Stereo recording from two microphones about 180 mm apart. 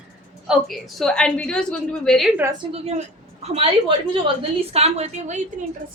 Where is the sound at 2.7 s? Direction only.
35° right (ahead or behind).